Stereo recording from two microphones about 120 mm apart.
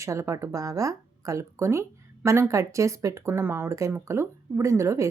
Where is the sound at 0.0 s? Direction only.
25° right (ahead or behind).